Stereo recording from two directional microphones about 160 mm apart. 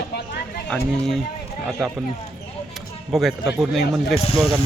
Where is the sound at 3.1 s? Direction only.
Centre (ahead or behind).